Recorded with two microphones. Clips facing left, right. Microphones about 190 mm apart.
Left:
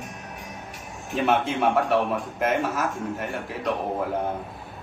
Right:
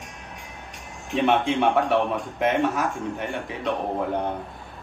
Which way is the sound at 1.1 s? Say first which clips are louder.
Right 2 dB; centre (ahead or behind).